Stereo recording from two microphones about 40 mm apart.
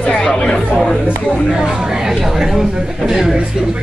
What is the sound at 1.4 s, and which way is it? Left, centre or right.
Speech, centre.